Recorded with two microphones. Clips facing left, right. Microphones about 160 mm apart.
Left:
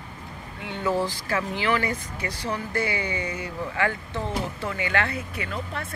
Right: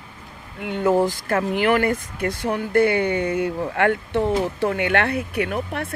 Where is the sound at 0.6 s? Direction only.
50° right (ahead or behind).